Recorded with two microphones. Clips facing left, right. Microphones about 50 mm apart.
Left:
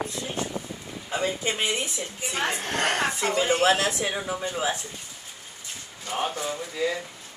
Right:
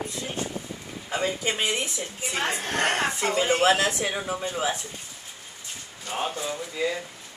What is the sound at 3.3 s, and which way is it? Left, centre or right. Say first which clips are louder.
Speech: right 1 dB; right.